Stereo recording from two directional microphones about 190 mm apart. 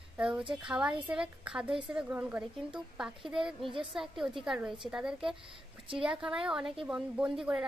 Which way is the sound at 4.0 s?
Centre (ahead or behind).